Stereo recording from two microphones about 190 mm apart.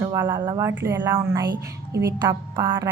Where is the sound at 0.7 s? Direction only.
10° right (ahead or behind).